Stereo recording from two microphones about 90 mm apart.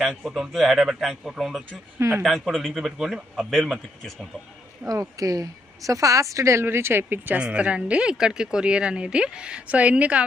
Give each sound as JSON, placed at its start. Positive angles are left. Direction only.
{"t": 0.0, "sound": "speech", "side_deg": 0}
{"t": 2.0, "sound": "speech", "side_deg": -30}
{"t": 2.2, "sound": "speech", "side_deg": 0}
{"t": 4.9, "sound": "speech", "side_deg": -40}